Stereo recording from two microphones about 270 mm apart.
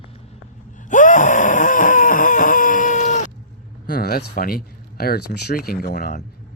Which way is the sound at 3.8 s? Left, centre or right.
Left.